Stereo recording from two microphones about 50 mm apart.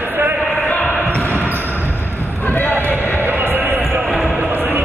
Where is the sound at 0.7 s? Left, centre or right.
Left.